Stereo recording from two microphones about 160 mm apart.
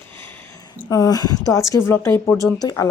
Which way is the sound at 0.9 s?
20° left (ahead or behind).